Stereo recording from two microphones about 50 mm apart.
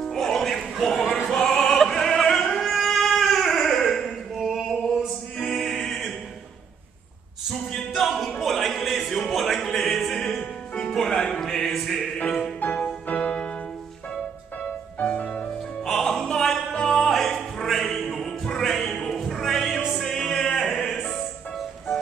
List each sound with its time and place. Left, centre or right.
0.0 s music: centre
0.8 s a sound: centre
1.3 s music: centre
2.7 s a sound: centre
5.5 s music: centre
7.9 s a capella: centre
9.3 s music: centre
12.6 s music: left
13.1 s music: left
15.8 s music: centre